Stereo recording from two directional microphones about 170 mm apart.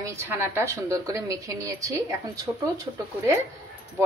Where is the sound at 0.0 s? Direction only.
15° right (ahead or behind).